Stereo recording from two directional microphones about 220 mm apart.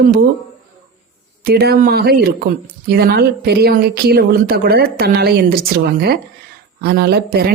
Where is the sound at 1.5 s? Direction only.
45° right (ahead or behind).